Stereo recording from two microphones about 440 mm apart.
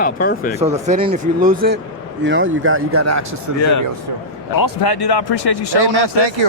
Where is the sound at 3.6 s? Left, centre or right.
Left.